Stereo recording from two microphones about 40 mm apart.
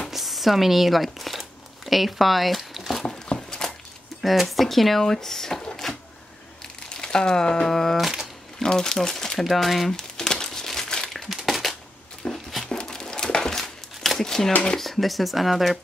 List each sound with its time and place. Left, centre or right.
0.1 s speech: centre
3.3 s a sound: centre
4.2 s speech: centre
5.8 s a sound: centre
6.9 s crumpling: centre
7.6 s speech: centre
8.6 s speech: left
8.9 s speech: centre
9.9 s crumpling: centre
11.4 s a sound: centre
12.2 s a sound: left
12.8 s crumpling: centre
14.8 s speech: centre